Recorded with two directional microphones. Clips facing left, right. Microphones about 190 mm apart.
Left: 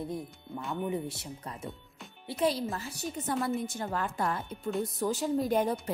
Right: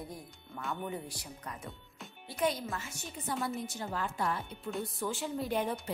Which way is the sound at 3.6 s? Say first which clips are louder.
Left 4 dB; 50° left (ahead or behind).